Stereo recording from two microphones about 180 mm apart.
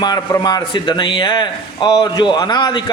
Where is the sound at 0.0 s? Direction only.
25° left (ahead or behind).